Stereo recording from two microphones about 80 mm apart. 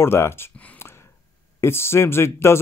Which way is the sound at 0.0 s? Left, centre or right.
Left.